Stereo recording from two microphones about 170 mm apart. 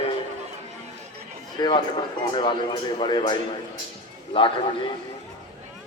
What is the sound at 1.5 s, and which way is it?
Speech, 25° left (ahead or behind).